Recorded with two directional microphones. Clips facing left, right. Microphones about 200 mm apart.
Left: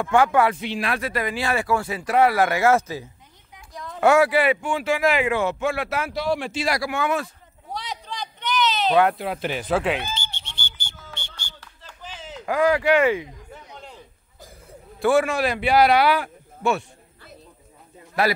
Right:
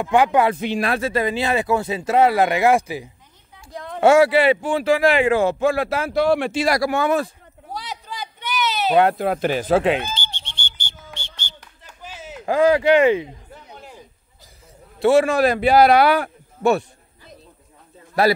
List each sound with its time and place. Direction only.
0.0 s speech: 15° right (ahead or behind)
0.6 s speech: 45° right (ahead or behind)
0.9 s speech: 25° right (ahead or behind)
3.7 s a sound: 60° right (ahead or behind)
4.0 s a man's voice: 25° right (ahead or behind)
6.1 s speech: 60° right (ahead or behind); by 7.2 s 35° right (ahead or behind)
7.7 s a sound: 5° right (ahead or behind)
9.2 s speech: 45° right (ahead or behind); by 10.7 s 30° right (ahead or behind)
11.6 s clapping: 10° right (ahead or behind)
12.4 s speech: 25° right (ahead or behind)
13.7 s a sound: 10° right (ahead or behind)
15.0 s a man's voice: 25° right (ahead or behind)
15.3 s a man's voice: 40° right (ahead or behind)